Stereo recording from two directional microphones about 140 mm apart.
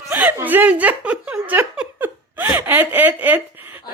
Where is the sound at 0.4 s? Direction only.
15° right (ahead or behind).